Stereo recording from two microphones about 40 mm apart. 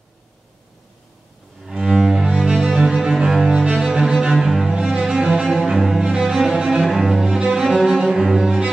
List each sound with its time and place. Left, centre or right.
1.7 s cello: centre
3.4 s cello: centre
4.3 s cello: centre